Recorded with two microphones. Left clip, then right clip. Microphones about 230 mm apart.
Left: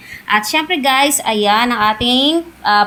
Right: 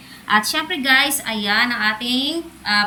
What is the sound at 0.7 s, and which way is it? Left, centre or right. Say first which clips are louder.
Speech: left 2 dB; centre.